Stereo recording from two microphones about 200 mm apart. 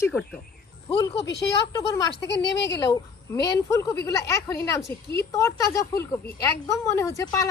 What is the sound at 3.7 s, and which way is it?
Speech, 15° left (ahead or behind).